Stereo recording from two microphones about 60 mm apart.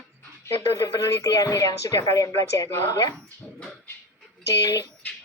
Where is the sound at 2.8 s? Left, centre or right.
Left.